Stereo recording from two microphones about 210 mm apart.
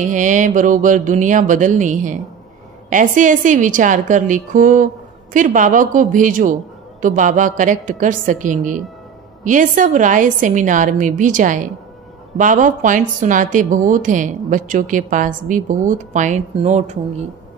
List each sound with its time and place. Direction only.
0.0 s a woman's voice: 35° right (ahead or behind)